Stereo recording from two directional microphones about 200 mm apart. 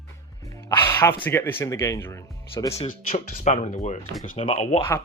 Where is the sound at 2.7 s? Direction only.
30° left (ahead or behind).